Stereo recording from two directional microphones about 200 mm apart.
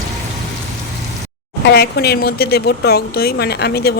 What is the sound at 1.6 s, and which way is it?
Speech, 55° left (ahead or behind).